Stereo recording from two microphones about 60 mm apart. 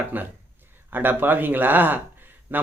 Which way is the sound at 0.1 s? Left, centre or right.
Right.